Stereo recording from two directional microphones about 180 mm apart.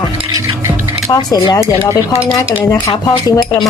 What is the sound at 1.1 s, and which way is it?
Speech, 20° left (ahead or behind).